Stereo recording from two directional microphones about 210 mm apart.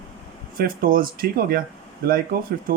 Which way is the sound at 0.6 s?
40° right (ahead or behind).